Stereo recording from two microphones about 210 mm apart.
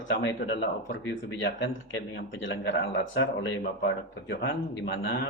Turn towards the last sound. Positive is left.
turn(degrees=55)  # may be behind; listen again after turning